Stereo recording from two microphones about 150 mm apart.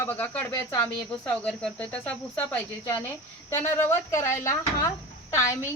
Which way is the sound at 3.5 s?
15° left (ahead or behind).